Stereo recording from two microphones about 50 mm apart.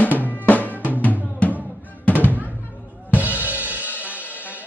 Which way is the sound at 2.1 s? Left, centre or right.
Left.